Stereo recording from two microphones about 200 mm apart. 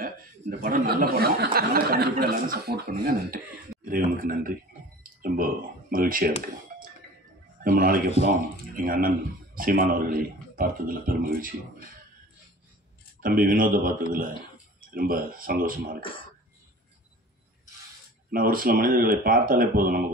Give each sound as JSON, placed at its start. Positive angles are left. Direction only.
{"t": 0.0, "sound": "speech", "side_deg": -45}
{"t": 7.6, "sound": "speech", "side_deg": -45}
{"t": 13.2, "sound": "speech", "side_deg": -45}
{"t": 18.3, "sound": "speech", "side_deg": -45}